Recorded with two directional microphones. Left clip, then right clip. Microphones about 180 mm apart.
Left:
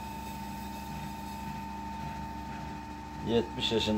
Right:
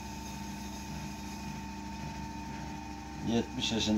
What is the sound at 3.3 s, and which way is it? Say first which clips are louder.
Speech: left 4 dB; 15° left (ahead or behind).